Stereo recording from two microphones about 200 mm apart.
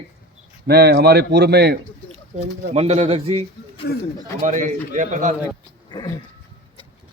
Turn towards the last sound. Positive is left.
turn(degrees=20)  # may be behind; listen again after turning